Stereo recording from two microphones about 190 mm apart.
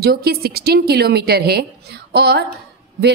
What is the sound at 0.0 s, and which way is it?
A woman's voice, 55° right (ahead or behind).